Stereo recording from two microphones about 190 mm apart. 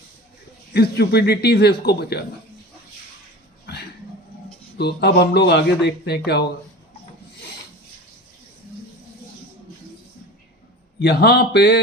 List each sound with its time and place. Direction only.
0.7 s speech: 60° left (ahead or behind)
4.8 s speech: 60° left (ahead or behind)
11.0 s speech: 60° left (ahead or behind)